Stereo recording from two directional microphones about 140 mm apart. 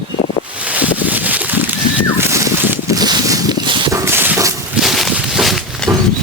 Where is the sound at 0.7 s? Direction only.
10° right (ahead or behind).